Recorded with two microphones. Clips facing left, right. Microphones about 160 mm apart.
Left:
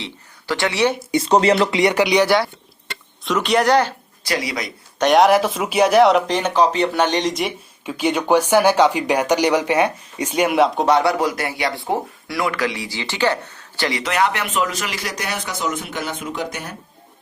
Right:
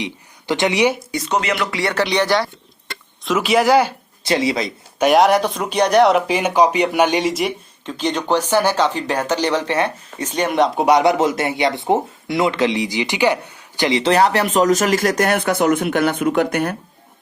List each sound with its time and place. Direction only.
0.0 s speech: 20° right (ahead or behind)
1.1 s speech: 30° left (ahead or behind)
1.7 s speech: 15° left (ahead or behind)
3.2 s speech: 5° right (ahead or behind)
4.2 s speech: 25° right (ahead or behind)
4.9 s speech: 5° right (ahead or behind)
7.9 s speech: 10° left (ahead or behind)
10.8 s speech: 15° right (ahead or behind); by 16.7 s 60° right (ahead or behind)